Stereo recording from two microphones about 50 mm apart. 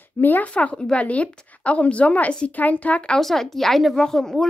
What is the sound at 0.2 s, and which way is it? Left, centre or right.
Speech, left.